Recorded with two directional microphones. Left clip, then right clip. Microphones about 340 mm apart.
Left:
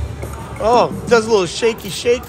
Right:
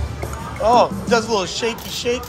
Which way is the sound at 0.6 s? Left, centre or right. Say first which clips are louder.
Left 1 dB; left.